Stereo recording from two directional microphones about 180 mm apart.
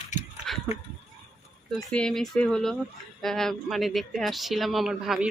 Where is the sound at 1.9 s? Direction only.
5° left (ahead or behind).